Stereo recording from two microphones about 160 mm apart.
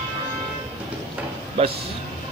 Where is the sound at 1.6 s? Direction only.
35° right (ahead or behind).